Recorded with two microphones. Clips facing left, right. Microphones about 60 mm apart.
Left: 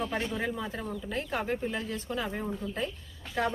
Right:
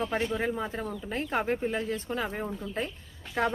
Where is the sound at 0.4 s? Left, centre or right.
Right.